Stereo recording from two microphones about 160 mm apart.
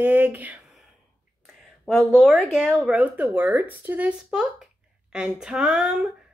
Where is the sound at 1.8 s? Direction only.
Centre (ahead or behind).